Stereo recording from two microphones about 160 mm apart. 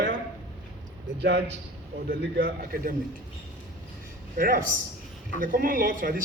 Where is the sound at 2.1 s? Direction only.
75° right (ahead or behind).